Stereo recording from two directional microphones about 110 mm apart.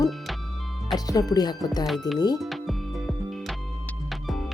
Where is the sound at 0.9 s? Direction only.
35° left (ahead or behind).